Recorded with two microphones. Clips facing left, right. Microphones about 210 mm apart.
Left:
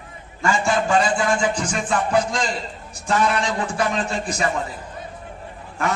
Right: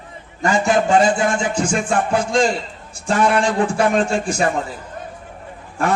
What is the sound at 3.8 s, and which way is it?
Speech, 50° right (ahead or behind).